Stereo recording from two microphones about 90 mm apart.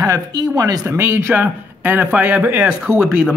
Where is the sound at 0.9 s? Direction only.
20° right (ahead or behind).